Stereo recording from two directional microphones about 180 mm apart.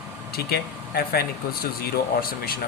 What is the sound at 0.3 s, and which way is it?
Speech, 60° left (ahead or behind).